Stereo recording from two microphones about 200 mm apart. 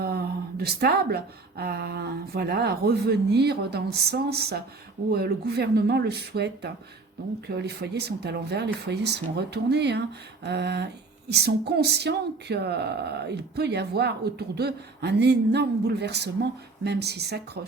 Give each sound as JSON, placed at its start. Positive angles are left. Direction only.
{"t": 0.0, "sound": "speech", "side_deg": -50}